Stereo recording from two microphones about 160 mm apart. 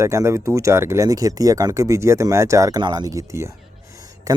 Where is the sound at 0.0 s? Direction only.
20° right (ahead or behind).